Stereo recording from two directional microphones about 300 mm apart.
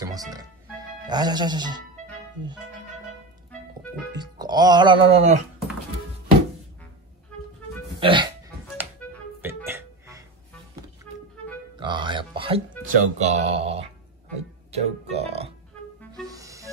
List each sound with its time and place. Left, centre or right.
1.0 s speech: centre
4.1 s speech: centre
8.0 s hiccup: centre
9.6 s music: centre
11.8 s a sound: centre
12.8 s speech: right
16.1 s music: centre